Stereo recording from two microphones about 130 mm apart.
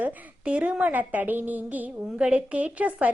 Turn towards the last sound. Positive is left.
turn(degrees=-10)  # may be behind; listen again after turning